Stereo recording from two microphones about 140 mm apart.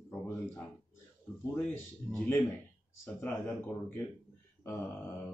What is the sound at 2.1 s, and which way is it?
Speech, 15° left (ahead or behind).